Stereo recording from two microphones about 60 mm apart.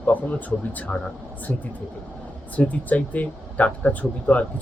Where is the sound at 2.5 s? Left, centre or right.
Left.